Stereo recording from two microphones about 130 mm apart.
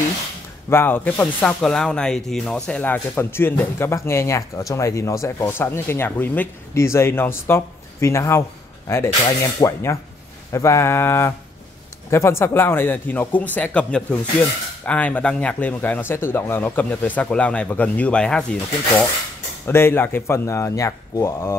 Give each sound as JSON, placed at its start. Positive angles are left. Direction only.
{"t": 0.7, "sound": "speech", "side_deg": 15}
{"t": 19.6, "sound": "speech", "side_deg": 20}